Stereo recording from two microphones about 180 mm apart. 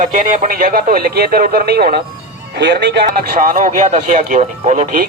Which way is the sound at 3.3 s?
50° right (ahead or behind).